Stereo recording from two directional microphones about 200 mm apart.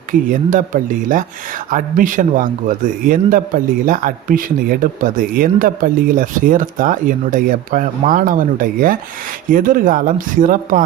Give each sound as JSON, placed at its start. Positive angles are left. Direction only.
{"t": 0.1, "sound": "a man's voice", "side_deg": -40}